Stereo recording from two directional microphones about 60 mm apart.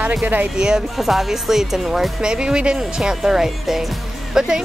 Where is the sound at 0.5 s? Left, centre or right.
Centre.